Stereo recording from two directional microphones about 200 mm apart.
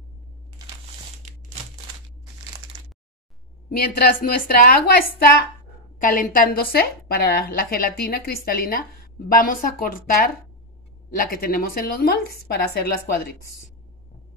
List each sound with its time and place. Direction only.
1.2 s crumpling: 35° right (ahead or behind)
3.7 s a woman's voice: 50° left (ahead or behind)
5.9 s a woman's voice: 45° left (ahead or behind)